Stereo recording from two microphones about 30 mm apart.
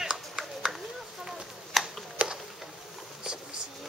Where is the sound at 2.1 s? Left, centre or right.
Right.